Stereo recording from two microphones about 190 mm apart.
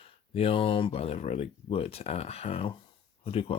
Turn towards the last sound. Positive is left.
turn(degrees=30)  # may be behind; listen again after turning